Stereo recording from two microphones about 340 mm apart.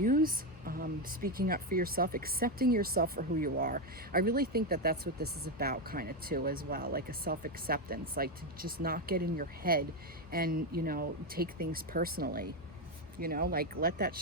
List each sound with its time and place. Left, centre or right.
0.0 s speech: right